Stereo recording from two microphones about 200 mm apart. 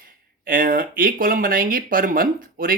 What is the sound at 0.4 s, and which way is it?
Speech, 45° right (ahead or behind).